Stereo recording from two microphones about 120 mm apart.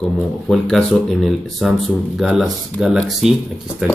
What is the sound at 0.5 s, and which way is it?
Speech, 5° left (ahead or behind).